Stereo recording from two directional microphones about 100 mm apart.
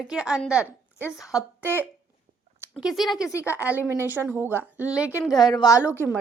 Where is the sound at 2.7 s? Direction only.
5° right (ahead or behind).